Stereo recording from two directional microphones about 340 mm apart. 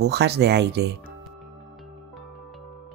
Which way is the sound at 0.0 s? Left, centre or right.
Right.